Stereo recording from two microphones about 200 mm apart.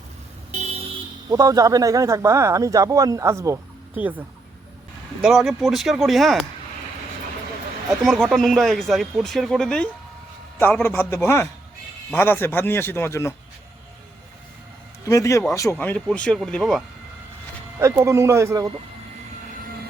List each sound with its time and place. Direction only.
1.3 s speech: 20° right (ahead or behind)
5.2 s speech: centre (ahead or behind)
8.0 s speech: centre (ahead or behind)
11.1 s speech: 10° left (ahead or behind)
15.0 s speech: 15° left (ahead or behind)
17.7 s speech: 15° right (ahead or behind)